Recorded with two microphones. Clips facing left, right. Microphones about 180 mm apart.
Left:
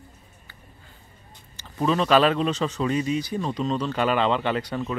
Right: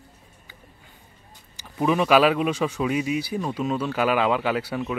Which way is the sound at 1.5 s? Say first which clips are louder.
Right 1 dB; 15° right (ahead or behind).